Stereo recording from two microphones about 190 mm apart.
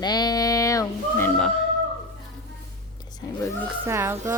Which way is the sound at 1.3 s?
Centre (ahead or behind).